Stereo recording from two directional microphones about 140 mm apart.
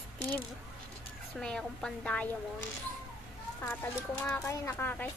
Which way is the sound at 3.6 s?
20° left (ahead or behind).